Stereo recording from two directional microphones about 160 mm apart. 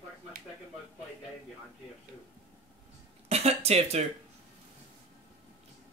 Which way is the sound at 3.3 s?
40° right (ahead or behind).